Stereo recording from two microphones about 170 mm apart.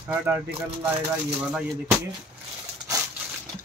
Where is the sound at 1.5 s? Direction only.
5° right (ahead or behind).